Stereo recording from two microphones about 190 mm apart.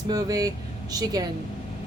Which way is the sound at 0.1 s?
20° right (ahead or behind).